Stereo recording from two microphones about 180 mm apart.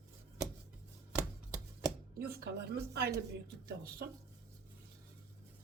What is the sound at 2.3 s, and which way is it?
A woman's voice, 65° right (ahead or behind).